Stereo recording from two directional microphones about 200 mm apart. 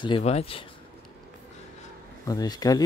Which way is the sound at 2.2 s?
20° left (ahead or behind).